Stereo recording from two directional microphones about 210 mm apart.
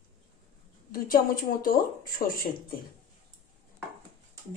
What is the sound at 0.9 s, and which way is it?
Speech, 45° left (ahead or behind).